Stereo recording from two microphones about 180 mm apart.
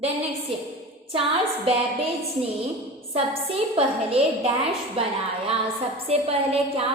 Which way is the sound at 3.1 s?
30° right (ahead or behind).